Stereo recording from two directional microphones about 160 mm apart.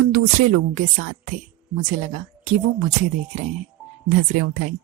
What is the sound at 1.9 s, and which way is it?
Speech, 50° right (ahead or behind).